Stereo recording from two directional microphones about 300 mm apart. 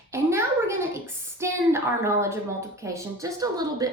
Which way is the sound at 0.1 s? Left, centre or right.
Centre.